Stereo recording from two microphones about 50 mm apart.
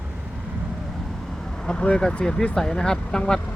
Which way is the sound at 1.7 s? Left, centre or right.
Left.